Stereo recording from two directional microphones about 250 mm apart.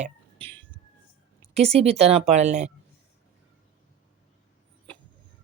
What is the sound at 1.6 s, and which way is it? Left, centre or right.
A woman's voice, right.